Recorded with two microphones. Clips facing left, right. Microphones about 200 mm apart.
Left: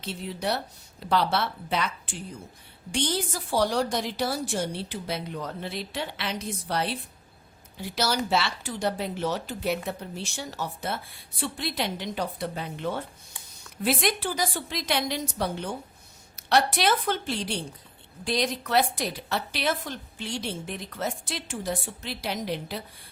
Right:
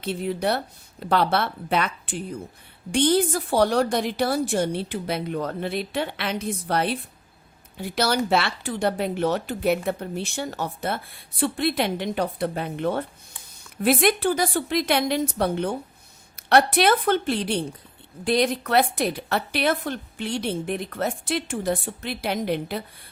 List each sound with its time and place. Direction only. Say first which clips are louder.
0.0 s speech: right 6 dB; 55° right (ahead or behind)